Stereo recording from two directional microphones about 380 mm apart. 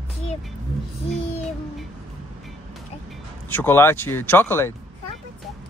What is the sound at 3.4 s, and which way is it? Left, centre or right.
Speech, centre.